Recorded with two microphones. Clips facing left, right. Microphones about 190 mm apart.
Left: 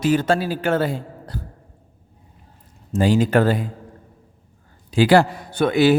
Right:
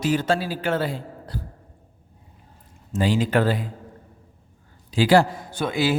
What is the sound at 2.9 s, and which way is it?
Speech, 45° left (ahead or behind).